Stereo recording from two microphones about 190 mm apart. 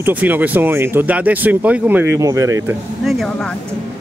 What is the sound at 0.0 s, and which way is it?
Speech, 10° right (ahead or behind).